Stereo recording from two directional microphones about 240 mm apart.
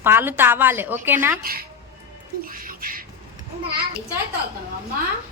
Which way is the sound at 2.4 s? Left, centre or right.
Right.